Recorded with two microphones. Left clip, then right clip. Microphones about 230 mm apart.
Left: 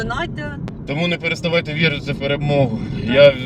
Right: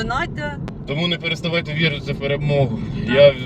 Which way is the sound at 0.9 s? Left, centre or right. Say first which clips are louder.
Left 2 dB; left.